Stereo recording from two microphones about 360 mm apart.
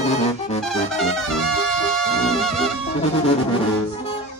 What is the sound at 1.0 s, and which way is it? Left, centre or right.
Music, centre.